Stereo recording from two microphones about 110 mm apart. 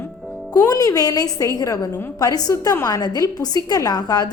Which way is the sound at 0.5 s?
35° left (ahead or behind).